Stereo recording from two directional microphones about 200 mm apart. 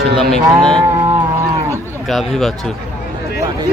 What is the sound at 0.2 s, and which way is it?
Speech, 5° left (ahead or behind).